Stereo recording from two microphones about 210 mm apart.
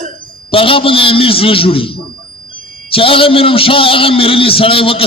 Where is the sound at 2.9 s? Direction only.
25° left (ahead or behind).